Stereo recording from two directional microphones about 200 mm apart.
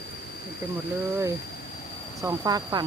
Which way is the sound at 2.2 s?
15° right (ahead or behind).